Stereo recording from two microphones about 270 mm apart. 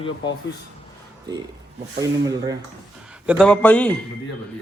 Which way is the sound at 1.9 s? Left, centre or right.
Centre.